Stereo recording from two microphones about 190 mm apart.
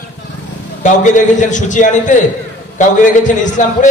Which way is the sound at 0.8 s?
40° left (ahead or behind).